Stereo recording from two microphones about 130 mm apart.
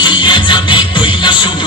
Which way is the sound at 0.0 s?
35° left (ahead or behind).